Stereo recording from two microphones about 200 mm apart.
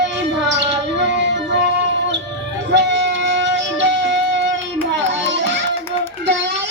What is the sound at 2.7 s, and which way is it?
Music, 60° right (ahead or behind).